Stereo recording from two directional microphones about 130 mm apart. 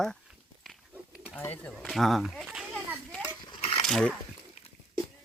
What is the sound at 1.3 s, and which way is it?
Speech, 15° left (ahead or behind).